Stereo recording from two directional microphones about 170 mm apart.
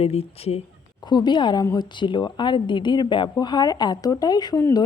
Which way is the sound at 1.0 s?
25° left (ahead or behind).